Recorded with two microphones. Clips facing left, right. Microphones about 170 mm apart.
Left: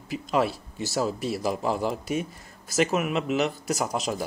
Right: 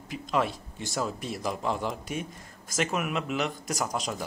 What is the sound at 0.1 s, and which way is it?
A man's voice, 5° left (ahead or behind).